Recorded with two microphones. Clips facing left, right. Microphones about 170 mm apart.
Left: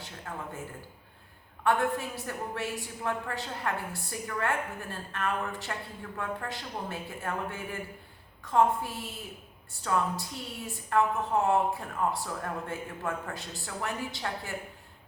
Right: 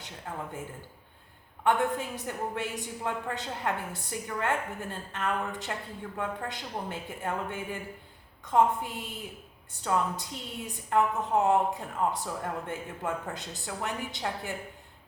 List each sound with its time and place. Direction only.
0.3 s speech: 20° right (ahead or behind)
1.6 s a woman's voice: 20° right (ahead or behind)